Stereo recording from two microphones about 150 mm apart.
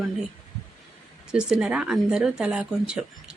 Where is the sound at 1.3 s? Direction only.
5° right (ahead or behind).